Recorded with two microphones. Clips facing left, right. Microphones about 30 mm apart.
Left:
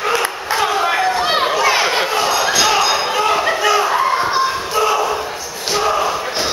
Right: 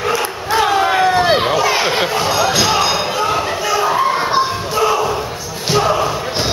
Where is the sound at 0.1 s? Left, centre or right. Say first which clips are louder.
Even; centre.